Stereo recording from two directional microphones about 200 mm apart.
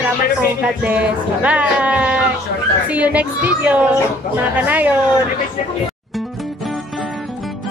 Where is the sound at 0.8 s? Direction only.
5° right (ahead or behind).